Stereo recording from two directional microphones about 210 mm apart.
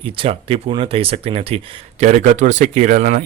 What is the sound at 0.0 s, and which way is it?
Speech, 25° right (ahead or behind).